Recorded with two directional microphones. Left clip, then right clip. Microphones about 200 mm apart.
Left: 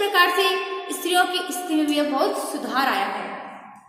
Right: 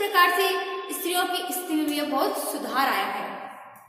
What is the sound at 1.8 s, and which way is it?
A woman's voice, 15° left (ahead or behind).